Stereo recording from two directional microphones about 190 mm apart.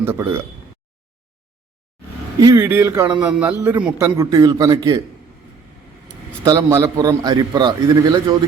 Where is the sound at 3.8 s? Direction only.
15° right (ahead or behind).